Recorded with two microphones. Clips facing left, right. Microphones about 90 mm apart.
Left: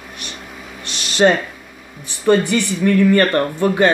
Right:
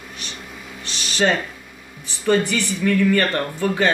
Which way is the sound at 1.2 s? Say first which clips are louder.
Left 6 dB; 25° left (ahead or behind).